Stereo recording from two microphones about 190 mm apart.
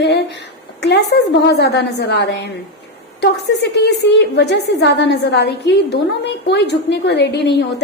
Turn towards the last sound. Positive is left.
turn(degrees=65)  # may be behind; listen again after turning